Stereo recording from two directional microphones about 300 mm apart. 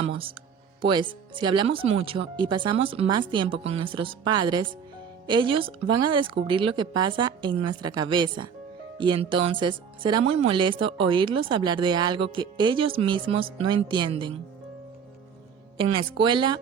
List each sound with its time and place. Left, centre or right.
0.0 s music: centre
0.8 s speech: centre
15.8 s speech: centre